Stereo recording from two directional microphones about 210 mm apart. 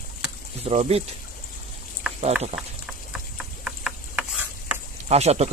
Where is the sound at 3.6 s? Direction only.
5° right (ahead or behind).